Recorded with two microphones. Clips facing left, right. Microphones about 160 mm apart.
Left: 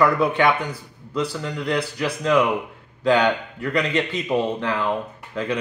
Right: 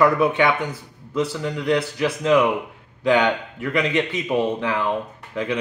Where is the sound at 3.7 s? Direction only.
20° right (ahead or behind).